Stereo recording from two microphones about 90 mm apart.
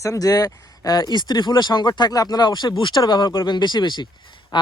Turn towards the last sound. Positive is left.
turn(degrees=60)  # may be behind; listen again after turning